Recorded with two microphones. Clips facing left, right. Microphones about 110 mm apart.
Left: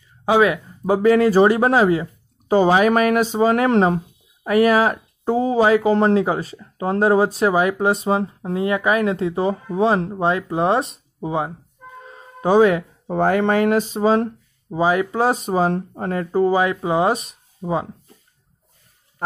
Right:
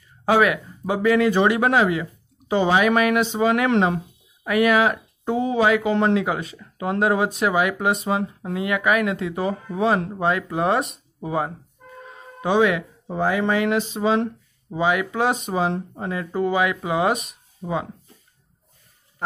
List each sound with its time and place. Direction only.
0.2 s a sound: 15° left (ahead or behind)
0.5 s speech: 35° left (ahead or behind)
11.1 s speech: 20° left (ahead or behind)
12.1 s music: 40° left (ahead or behind)
13.0 s speech: 55° left (ahead or behind); by 15.7 s 35° left (ahead or behind)
15.7 s speech: 50° left (ahead or behind)
16.3 s speech: 35° left (ahead or behind)